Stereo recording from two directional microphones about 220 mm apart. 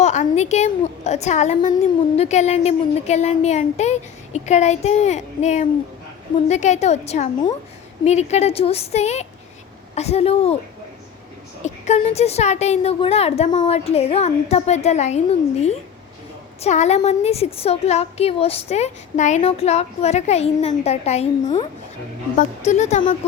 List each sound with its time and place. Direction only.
0.0 s a woman's voice: 30° left (ahead or behind)
11.6 s a woman's voice: 30° left (ahead or behind)